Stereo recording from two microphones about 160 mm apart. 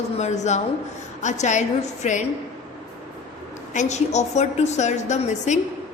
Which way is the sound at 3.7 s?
50° left (ahead or behind).